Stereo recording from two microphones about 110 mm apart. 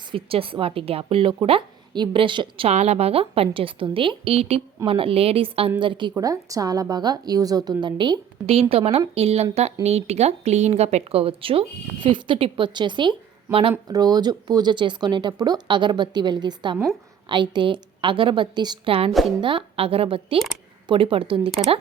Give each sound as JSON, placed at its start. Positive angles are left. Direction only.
{"t": 0.1, "sound": "speech", "side_deg": -55}
{"t": 2.6, "sound": "a woman's voice", "side_deg": -70}
{"t": 5.8, "sound": "speech", "side_deg": -45}
{"t": 6.1, "sound": "speech", "side_deg": -30}
{"t": 8.7, "sound": "speech", "side_deg": -65}
{"t": 12.0, "sound": "speech", "side_deg": -50}
{"t": 13.8, "sound": "speech", "side_deg": -35}
{"t": 18.9, "sound": "a woman's voice", "side_deg": -60}